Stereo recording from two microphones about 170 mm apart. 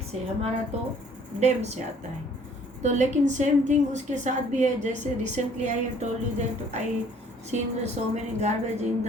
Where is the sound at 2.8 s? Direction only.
45° right (ahead or behind).